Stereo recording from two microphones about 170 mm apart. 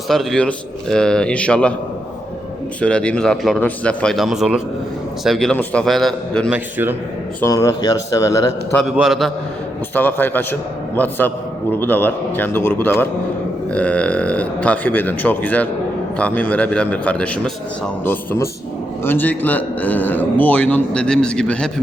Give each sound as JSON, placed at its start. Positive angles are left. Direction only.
{"t": 0.1, "sound": "speech", "side_deg": 0}
{"t": 2.8, "sound": "speech", "side_deg": 5}
{"t": 6.5, "sound": "a man's voice", "side_deg": -10}
{"t": 7.4, "sound": "speech", "side_deg": 20}
{"t": 9.0, "sound": "speech", "side_deg": 0}
{"t": 9.9, "sound": "speech", "side_deg": 10}